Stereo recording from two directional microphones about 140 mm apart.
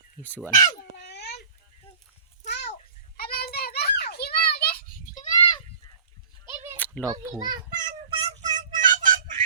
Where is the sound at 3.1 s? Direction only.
90° left.